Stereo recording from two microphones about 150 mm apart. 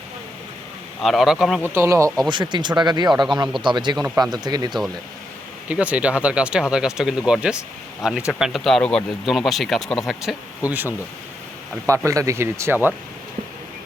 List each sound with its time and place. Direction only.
1.0 s speech: centre (ahead or behind)
1.6 s speech: 15° right (ahead or behind)
2.1 s speech: 30° right (ahead or behind)
5.6 s speech: 10° right (ahead or behind)
10.6 s speech: 10° right (ahead or behind)
11.9 s speech: 20° right (ahead or behind)